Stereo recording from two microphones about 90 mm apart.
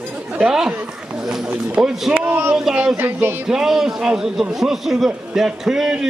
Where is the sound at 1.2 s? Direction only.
5° right (ahead or behind).